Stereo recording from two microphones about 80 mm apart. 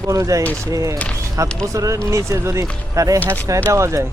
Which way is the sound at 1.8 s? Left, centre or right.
Right.